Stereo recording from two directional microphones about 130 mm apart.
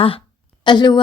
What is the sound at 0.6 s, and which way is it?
Speech, 35° left (ahead or behind).